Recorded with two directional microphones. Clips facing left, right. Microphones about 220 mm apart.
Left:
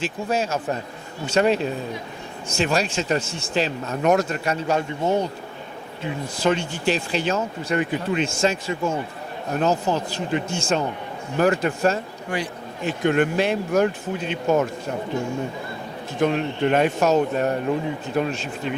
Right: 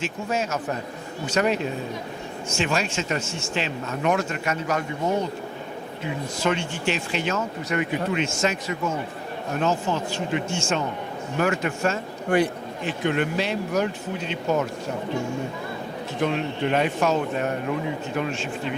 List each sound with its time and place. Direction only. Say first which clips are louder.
0.0 s speech: left 2 dB; 35° left (ahead or behind)
6.4 s speech: left 4 dB; 35° left (ahead or behind)
12.3 s speech: right 7 dB; 55° right (ahead or behind)
12.8 s speech: left 4 dB; 50° left (ahead or behind)
16.2 s speech: left 4 dB; 45° left (ahead or behind)